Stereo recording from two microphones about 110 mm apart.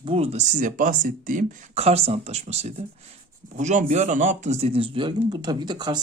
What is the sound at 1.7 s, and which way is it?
Speech, 70° right (ahead or behind).